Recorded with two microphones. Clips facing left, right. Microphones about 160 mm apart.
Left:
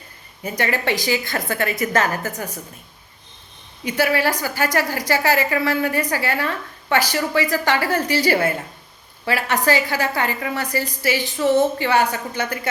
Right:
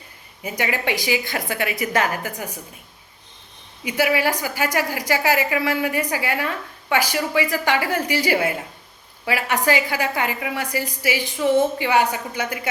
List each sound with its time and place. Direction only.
0.4 s a woman's voice: 10° right (ahead or behind)
3.8 s a woman's voice: 15° right (ahead or behind)